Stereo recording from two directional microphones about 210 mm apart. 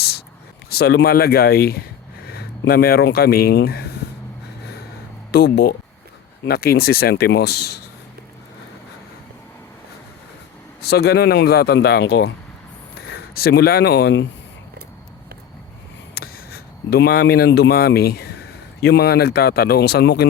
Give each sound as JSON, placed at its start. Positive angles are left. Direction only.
{"t": 0.7, "sound": "speech", "side_deg": 50}
{"t": 5.3, "sound": "speech", "side_deg": 50}
{"t": 10.8, "sound": "speech", "side_deg": 50}
{"t": 16.1, "sound": "speech", "side_deg": 50}